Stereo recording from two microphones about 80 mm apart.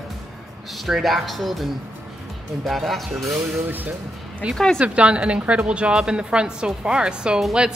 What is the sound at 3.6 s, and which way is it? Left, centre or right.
A woman's voice, right.